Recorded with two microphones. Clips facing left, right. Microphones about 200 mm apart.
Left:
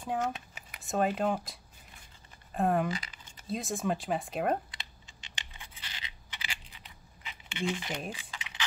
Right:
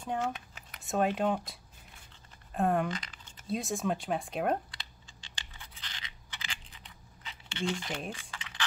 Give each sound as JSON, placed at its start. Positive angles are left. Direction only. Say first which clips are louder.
{"t": 0.0, "sound": "speech", "louder": "left 1 dB", "side_deg": 5}
{"t": 2.5, "sound": "speech", "louder": "left 1 dB", "side_deg": 0}
{"t": 4.6, "sound": "scratch", "louder": "left 1 dB", "side_deg": 20}
{"t": 7.2, "sound": "a sound", "louder": "even", "side_deg": 10}